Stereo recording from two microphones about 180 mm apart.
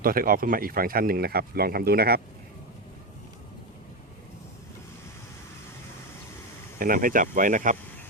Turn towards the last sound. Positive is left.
turn(degrees=-45)  # may be behind; listen again after turning